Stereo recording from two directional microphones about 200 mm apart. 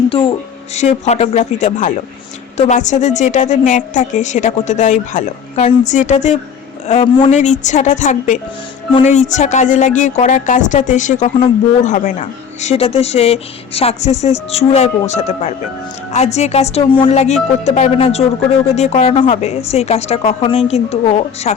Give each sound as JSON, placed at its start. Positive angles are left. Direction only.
{"t": 0.1, "sound": "a woman's voice", "side_deg": 25}
{"t": 11.3, "sound": "speech", "side_deg": 25}
{"t": 11.9, "sound": "a woman's voice", "side_deg": 40}